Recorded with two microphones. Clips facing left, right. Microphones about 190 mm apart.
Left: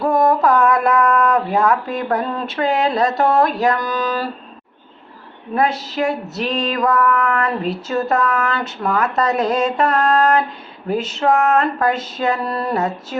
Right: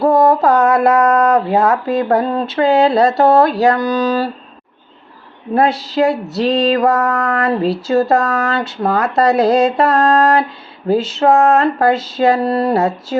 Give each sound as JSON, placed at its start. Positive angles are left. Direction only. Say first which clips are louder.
{"t": 0.0, "sound": "speech", "louder": "right 4 dB", "side_deg": -25}
{"t": 6.3, "sound": "a sound", "louder": "right 7 dB", "side_deg": -30}
{"t": 7.6, "sound": "speech", "louder": "right 6 dB", "side_deg": -30}